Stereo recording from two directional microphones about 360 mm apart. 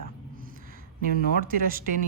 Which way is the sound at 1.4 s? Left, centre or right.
Right.